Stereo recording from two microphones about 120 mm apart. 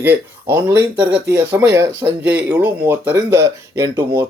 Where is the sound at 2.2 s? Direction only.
10° right (ahead or behind).